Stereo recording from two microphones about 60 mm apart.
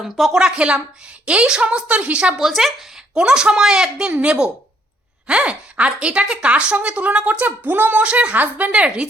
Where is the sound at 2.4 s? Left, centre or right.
Centre.